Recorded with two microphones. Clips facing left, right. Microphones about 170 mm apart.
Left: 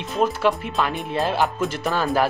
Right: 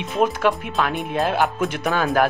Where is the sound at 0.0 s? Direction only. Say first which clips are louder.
Right 1 dB; centre (ahead or behind).